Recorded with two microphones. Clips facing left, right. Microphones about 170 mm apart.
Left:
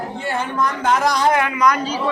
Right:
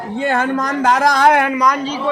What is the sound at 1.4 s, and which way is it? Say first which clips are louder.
Speech: right 2 dB; 40° right (ahead or behind).